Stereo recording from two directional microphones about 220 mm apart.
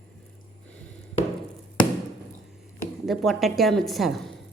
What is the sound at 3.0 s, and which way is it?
A woman's voice, centre (ahead or behind).